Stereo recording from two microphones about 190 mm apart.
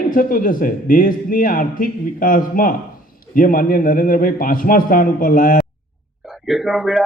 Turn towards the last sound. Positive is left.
turn(degrees=0)  # may be behind; listen again after turning